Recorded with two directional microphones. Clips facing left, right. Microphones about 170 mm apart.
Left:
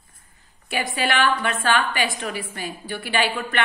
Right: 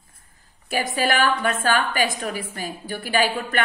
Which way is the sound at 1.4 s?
40° right (ahead or behind).